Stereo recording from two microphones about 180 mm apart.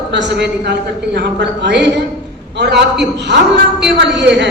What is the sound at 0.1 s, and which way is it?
A man's voice, 70° right (ahead or behind).